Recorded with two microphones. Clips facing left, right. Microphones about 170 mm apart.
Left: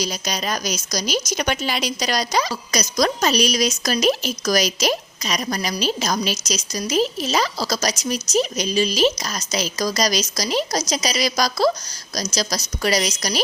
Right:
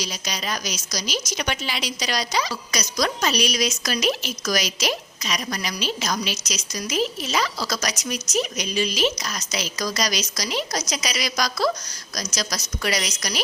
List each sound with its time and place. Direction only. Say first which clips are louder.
0.0 s a woman's voice: left 5 dB; 45° left (ahead or behind)